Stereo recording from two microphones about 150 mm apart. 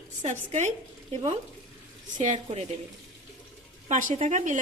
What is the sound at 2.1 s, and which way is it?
Speech, 55° right (ahead or behind).